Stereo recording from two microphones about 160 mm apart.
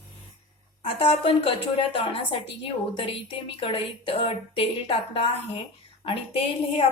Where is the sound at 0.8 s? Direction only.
35° left (ahead or behind).